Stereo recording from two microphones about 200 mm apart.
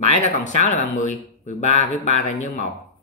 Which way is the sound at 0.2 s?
35° left (ahead or behind).